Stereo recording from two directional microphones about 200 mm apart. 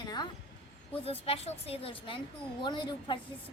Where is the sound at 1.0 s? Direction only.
30° left (ahead or behind).